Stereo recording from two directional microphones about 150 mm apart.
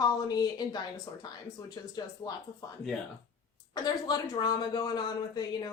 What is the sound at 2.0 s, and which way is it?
Speech, 25° left (ahead or behind).